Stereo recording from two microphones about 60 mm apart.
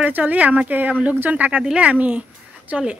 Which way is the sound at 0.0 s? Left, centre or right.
Right.